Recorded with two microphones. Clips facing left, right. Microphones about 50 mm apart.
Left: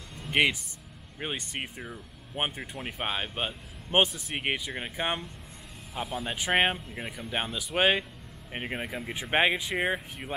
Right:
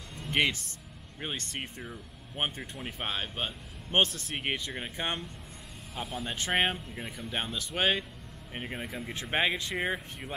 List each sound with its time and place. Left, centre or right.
0.2 s music: centre
1.2 s speech: centre
8.5 s speech: left
8.8 s speech: centre